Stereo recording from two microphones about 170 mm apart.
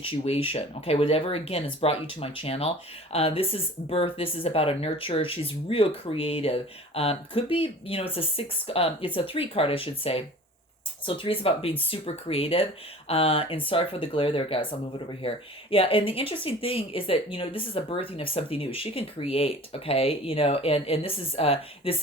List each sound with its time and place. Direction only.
0.0 s speech: 30° left (ahead or behind)